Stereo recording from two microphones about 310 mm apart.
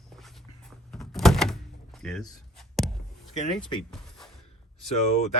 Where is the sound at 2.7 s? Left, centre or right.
Centre.